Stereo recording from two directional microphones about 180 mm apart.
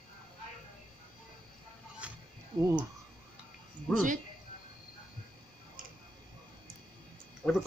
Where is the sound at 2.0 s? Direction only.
5° right (ahead or behind).